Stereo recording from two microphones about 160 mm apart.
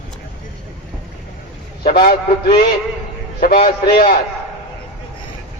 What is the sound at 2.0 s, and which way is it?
A man's voice, 70° left (ahead or behind).